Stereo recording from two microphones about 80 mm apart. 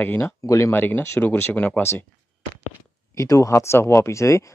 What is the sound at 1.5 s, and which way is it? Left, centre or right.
Speech, centre.